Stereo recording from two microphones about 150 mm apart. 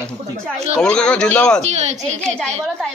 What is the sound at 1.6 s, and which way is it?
Speech, 50° right (ahead or behind).